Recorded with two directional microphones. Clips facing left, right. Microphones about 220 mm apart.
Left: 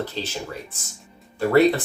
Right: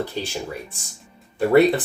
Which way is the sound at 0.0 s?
15° right (ahead or behind).